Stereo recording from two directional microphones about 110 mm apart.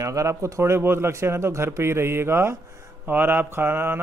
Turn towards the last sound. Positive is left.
turn(degrees=-20)  # may be behind; listen again after turning